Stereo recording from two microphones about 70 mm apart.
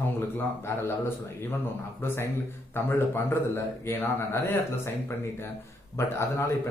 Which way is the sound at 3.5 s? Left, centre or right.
Left.